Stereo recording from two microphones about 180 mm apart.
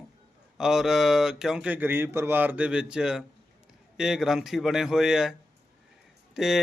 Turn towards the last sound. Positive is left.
turn(degrees=-5)  # may be behind; listen again after turning